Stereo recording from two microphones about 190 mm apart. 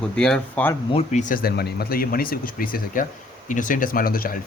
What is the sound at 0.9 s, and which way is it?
Speech, 35° left (ahead or behind).